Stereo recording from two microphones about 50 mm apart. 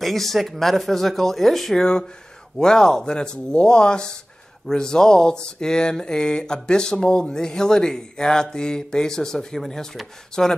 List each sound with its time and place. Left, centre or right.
0.0 s speech: centre